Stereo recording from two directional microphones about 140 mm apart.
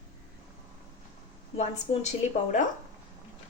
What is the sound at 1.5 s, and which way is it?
A woman's voice, 55° left (ahead or behind).